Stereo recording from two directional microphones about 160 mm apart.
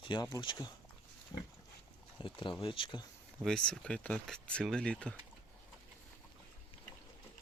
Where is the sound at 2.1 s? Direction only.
30° left (ahead or behind).